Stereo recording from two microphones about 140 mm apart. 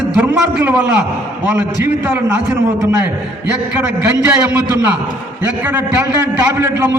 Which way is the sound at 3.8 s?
10° right (ahead or behind).